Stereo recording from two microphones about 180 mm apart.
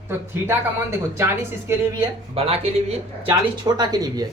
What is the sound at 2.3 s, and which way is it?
Speech, 35° right (ahead or behind).